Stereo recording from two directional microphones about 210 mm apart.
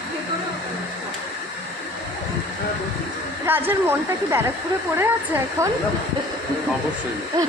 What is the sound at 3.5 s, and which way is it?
Speech, 10° right (ahead or behind).